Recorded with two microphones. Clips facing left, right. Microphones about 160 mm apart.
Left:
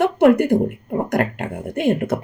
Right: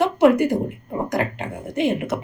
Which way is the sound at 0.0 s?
55° left (ahead or behind).